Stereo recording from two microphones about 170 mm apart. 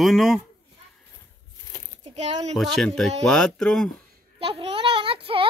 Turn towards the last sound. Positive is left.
turn(degrees=-30)  # may be behind; listen again after turning